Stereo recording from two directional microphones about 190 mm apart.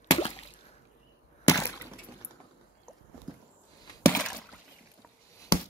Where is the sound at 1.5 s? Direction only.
15° left (ahead or behind).